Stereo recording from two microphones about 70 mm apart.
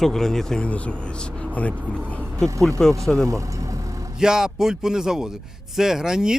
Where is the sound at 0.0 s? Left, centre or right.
Centre.